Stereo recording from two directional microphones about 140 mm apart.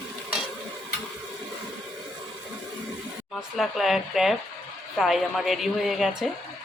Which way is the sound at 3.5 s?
Centre (ahead or behind).